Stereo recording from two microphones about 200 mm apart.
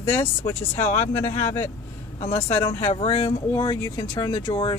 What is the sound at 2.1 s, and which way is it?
Speech, 35° left (ahead or behind).